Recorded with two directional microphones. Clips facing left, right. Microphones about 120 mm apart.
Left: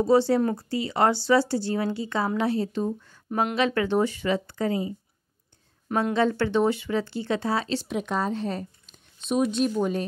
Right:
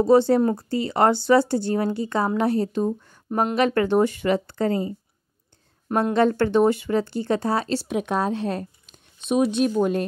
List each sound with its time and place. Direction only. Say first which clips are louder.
0.0 s speech: right 4 dB; 55° right (ahead or behind)
5.9 s a woman's voice: right 3 dB; 40° right (ahead or behind)
6.1 s speech: right 5 dB; 55° right (ahead or behind)